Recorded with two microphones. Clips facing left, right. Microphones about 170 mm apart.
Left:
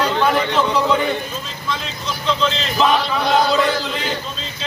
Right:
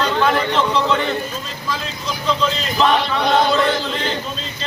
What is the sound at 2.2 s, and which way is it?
Chant, centre (ahead or behind).